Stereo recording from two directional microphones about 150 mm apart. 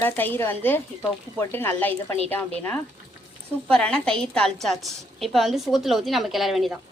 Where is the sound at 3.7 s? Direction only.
5° left (ahead or behind).